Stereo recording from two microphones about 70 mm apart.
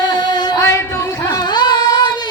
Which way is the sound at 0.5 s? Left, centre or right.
Left.